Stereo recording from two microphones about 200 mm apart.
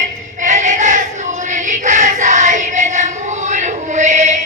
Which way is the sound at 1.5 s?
40° right (ahead or behind).